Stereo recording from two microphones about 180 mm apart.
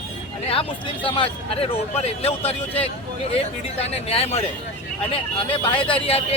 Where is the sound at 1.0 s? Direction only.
30° left (ahead or behind).